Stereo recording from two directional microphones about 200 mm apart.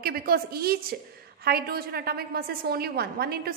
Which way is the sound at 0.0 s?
50° right (ahead or behind).